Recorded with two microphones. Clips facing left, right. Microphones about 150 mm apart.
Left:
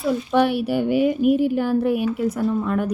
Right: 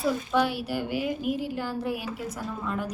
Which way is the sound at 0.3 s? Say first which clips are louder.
Left 10 dB; 60° left (ahead or behind).